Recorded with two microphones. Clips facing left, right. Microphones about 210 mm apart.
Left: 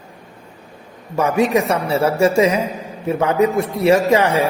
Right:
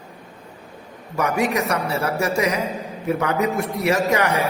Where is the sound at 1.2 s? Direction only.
30° left (ahead or behind).